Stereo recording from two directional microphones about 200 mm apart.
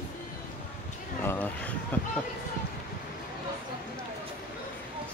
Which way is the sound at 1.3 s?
5° left (ahead or behind).